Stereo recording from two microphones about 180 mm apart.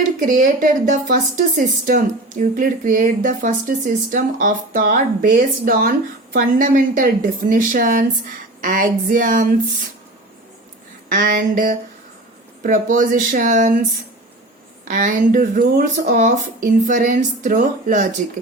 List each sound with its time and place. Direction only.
0.3 s a woman's voice: 50° right (ahead or behind)
11.1 s a woman's voice: 50° right (ahead or behind)
14.8 s a woman's voice: 45° right (ahead or behind)